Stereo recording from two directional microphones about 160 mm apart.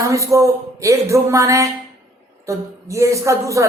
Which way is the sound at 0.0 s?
20° right (ahead or behind).